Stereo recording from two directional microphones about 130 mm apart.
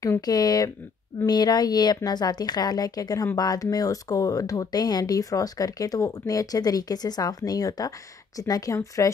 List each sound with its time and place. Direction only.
0.0 s a woman's voice: 30° left (ahead or behind)